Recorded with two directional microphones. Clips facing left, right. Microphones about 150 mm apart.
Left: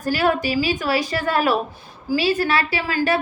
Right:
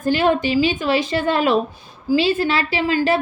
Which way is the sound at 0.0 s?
25° right (ahead or behind).